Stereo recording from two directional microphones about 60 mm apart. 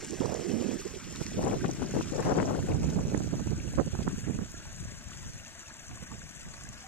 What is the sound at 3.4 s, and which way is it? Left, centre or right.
Boat, left.